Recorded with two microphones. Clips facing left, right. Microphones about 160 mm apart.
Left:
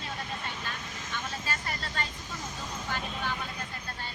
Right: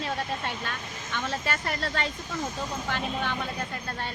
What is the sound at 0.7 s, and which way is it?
Speech, 65° right (ahead or behind).